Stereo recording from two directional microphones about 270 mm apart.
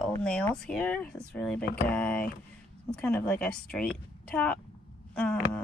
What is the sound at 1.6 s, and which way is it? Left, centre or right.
Speech, left.